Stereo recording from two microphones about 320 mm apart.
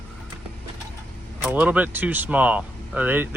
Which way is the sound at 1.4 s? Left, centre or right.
Centre.